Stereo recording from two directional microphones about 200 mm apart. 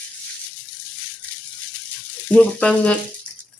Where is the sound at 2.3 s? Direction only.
5° left (ahead or behind).